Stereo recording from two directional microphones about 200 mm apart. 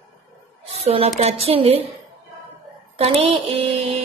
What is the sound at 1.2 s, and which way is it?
Speech, 30° right (ahead or behind).